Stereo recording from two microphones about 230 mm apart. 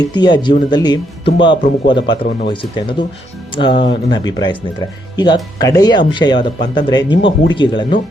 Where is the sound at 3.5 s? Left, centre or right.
Left.